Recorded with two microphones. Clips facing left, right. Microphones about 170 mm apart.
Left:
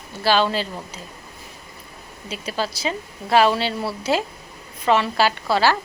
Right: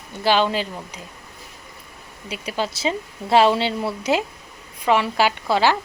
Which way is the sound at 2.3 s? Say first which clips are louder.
Right 1 dB; 15° right (ahead or behind).